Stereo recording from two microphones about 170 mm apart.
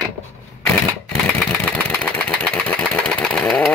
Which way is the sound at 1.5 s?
5° left (ahead or behind).